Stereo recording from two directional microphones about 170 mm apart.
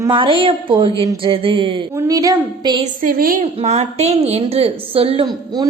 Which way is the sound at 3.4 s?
35° right (ahead or behind).